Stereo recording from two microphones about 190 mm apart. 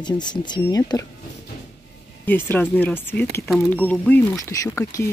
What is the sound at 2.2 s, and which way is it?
Speech, 10° left (ahead or behind).